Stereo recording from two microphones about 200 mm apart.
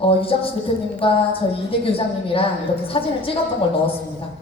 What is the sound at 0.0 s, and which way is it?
A woman's voice, 25° left (ahead or behind).